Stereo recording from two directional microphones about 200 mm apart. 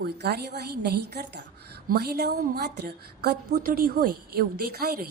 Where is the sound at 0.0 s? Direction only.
55° right (ahead or behind).